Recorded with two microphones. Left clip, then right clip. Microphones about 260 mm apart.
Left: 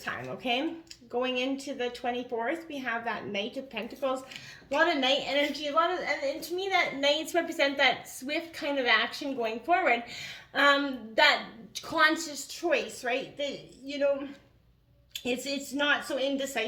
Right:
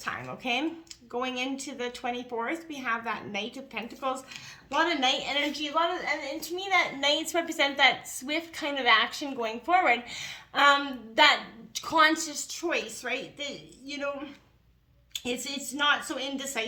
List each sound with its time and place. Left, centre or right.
0.0 s a woman's voice: right
15.1 s a woman's voice: right